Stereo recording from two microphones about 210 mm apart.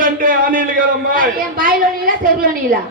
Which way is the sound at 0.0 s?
40° right (ahead or behind).